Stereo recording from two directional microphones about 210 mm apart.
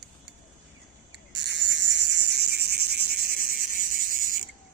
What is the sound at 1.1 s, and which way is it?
Cricket, 55° right (ahead or behind).